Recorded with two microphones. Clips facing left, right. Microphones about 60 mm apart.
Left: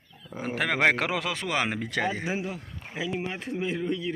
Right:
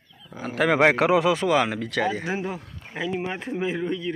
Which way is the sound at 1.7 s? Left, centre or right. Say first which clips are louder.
Right 3 dB; centre.